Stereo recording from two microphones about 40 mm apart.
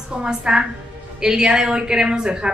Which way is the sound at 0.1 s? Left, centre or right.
Centre.